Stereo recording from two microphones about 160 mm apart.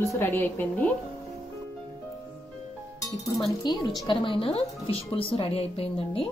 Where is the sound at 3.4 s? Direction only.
25° left (ahead or behind).